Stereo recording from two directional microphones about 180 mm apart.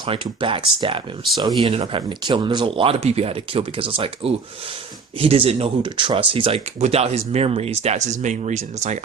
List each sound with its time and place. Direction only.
0.0 s speech: 30° right (ahead or behind)